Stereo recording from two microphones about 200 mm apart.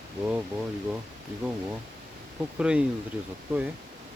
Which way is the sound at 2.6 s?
5° right (ahead or behind).